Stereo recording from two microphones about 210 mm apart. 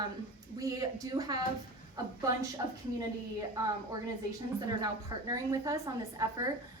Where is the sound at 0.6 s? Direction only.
15° right (ahead or behind).